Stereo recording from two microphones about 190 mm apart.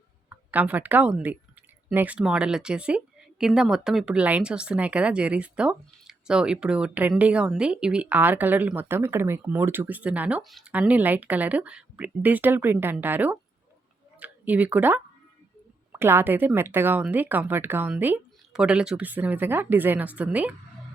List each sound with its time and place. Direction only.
0.3 s speech: 10° right (ahead or behind)